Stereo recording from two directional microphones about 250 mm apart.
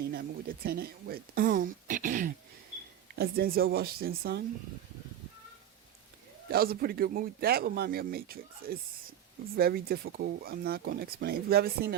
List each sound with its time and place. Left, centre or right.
0.1 s speech: right
6.5 s speech: right